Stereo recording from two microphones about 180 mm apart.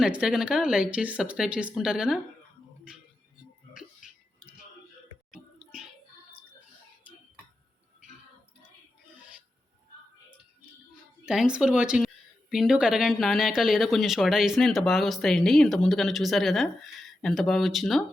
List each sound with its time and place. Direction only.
0.0 s speech: 5° right (ahead or behind)
11.3 s speech: 5° right (ahead or behind)